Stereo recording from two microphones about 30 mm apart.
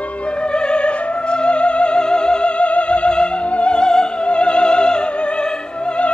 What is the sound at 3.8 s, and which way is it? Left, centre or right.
Music, left.